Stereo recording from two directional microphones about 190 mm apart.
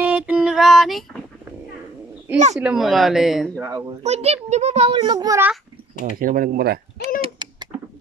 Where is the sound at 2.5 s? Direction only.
Centre (ahead or behind).